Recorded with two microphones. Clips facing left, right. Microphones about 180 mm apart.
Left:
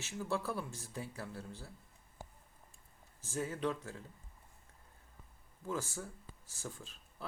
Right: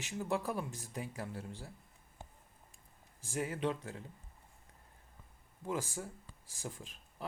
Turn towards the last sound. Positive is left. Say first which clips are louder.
# right 1 dB
turn(degrees=-15)  # may be behind; listen again after turning